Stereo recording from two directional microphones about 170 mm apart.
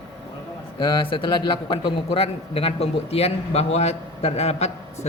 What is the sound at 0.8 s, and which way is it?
A man's voice, 25° left (ahead or behind).